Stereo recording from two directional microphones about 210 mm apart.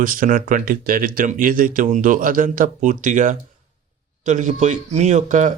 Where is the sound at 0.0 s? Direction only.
40° right (ahead or behind).